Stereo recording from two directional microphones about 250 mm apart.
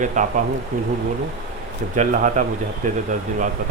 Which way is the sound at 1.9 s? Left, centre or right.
Right.